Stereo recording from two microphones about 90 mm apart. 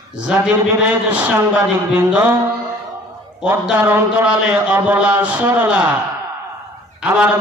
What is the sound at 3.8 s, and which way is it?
Speech, 25° right (ahead or behind).